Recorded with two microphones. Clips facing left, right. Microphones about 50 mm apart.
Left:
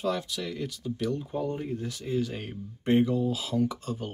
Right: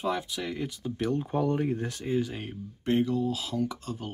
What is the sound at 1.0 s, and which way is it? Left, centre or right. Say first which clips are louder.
Speech: right 2 dB; right.